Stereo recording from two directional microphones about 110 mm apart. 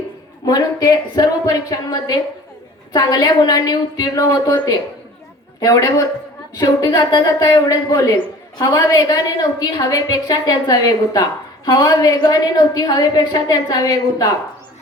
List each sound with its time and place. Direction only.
0.4 s a woman's voice: 35° left (ahead or behind)